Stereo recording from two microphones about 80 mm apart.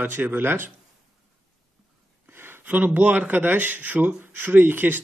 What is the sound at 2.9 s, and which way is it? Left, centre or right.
Speech, centre.